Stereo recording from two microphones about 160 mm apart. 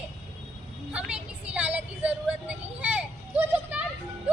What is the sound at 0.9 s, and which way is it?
Vehicle, 5° right (ahead or behind).